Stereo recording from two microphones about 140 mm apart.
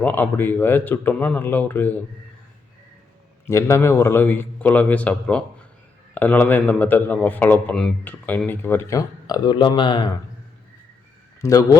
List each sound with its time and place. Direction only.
0.0 s a man's voice: 15° left (ahead or behind)
3.4 s a man's voice: 20° left (ahead or behind)
11.3 s a man's voice: 25° left (ahead or behind)